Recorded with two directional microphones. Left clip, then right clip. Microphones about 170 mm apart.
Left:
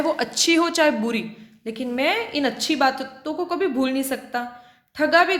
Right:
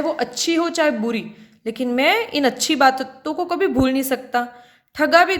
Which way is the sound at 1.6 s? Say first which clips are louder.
Right 5 dB; 35° right (ahead or behind).